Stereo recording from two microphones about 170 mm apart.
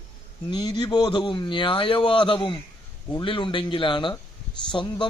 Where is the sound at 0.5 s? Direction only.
25° left (ahead or behind).